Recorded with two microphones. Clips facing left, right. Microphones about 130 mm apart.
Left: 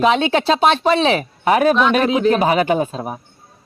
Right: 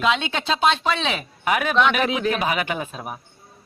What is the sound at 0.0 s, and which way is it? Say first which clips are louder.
Speech: left 7 dB; 40° left (ahead or behind).